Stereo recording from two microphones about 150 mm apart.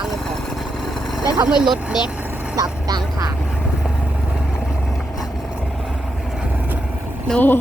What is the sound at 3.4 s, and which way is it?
Vehicle, 5° right (ahead or behind).